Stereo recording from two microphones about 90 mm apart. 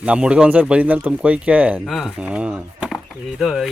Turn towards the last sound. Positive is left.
turn(degrees=-5)  # may be behind; listen again after turning